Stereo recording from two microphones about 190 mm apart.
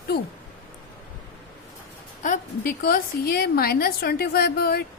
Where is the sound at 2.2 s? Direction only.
45° left (ahead or behind).